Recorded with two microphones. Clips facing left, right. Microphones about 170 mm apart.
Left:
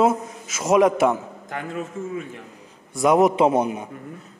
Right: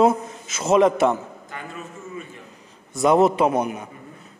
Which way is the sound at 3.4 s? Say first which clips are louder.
Left 2 dB; 25° left (ahead or behind).